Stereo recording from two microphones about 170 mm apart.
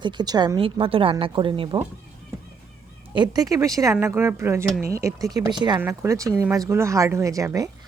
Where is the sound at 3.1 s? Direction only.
25° right (ahead or behind).